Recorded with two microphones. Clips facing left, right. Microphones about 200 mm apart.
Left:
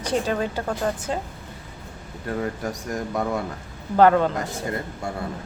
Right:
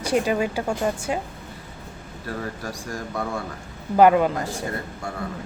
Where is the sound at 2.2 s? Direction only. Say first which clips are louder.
Left 4 dB; 20° left (ahead or behind).